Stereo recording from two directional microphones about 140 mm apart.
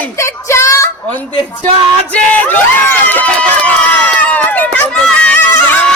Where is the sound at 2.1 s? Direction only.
10° left (ahead or behind).